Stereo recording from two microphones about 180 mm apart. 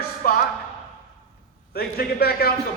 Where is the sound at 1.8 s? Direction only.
60° left (ahead or behind).